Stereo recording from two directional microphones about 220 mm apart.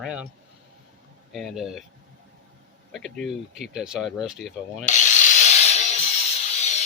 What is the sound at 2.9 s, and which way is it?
Speech, centre (ahead or behind).